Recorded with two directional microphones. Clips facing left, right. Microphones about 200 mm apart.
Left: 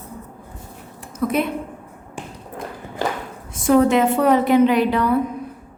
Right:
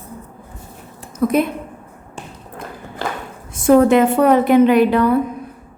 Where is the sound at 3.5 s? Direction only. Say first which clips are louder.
Right 4 dB; 50° right (ahead or behind).